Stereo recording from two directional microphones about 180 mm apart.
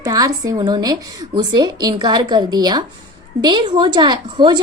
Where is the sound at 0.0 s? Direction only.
20° right (ahead or behind).